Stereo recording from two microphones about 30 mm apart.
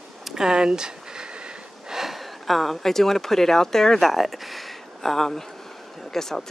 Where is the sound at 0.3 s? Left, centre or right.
Right.